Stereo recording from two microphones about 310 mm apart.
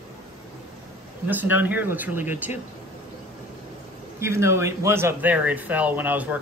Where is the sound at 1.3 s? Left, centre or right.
Centre.